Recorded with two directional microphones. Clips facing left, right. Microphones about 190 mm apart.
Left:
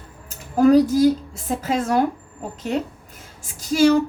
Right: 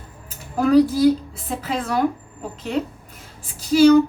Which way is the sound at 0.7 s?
45° left (ahead or behind).